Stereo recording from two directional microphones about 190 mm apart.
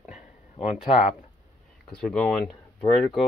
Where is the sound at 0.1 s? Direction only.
35° left (ahead or behind).